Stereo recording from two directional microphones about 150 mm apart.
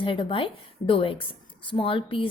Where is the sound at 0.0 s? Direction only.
35° left (ahead or behind).